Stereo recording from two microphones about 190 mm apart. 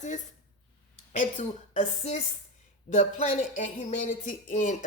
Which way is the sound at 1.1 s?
40° left (ahead or behind).